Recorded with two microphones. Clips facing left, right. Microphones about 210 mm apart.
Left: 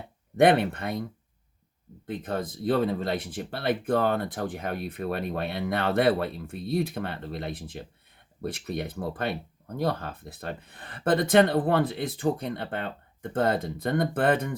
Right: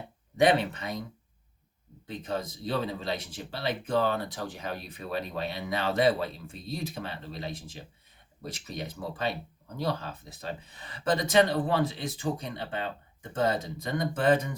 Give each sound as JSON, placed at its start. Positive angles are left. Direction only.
{"t": 0.3, "sound": "speech", "side_deg": 55}
{"t": 2.0, "sound": "speech", "side_deg": 55}